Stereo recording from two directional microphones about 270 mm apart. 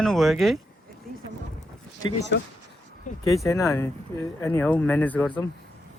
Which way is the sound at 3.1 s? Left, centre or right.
Left.